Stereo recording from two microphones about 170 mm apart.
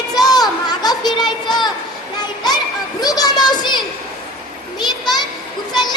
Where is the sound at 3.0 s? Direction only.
20° left (ahead or behind).